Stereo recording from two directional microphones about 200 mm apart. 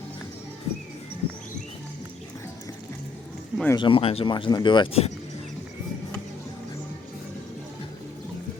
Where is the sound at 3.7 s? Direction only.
25° left (ahead or behind).